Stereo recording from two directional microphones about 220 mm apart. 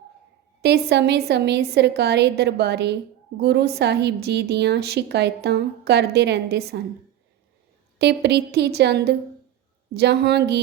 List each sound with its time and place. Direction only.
0.6 s a woman's voice: 50° right (ahead or behind)
7.9 s a woman's voice: 50° right (ahead or behind)